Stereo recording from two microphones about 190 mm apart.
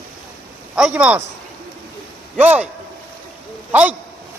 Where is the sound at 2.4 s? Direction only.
5° right (ahead or behind).